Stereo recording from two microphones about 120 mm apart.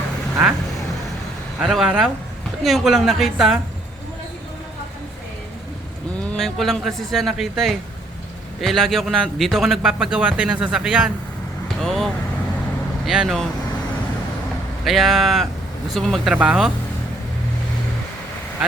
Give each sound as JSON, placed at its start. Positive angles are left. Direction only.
{"t": 1.6, "sound": "a man's voice", "side_deg": -5}
{"t": 6.3, "sound": "a man's voice", "side_deg": 0}
{"t": 14.8, "sound": "a man's voice", "side_deg": 0}